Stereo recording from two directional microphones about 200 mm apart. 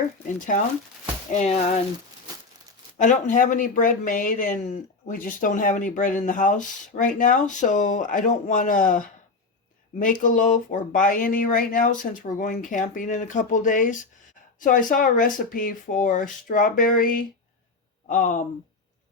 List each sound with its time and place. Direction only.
0.3 s speech: 40° left (ahead or behind)
3.0 s speech: 40° left (ahead or behind)